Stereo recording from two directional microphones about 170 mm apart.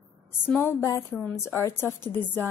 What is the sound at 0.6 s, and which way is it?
A woman's voice, 15° left (ahead or behind).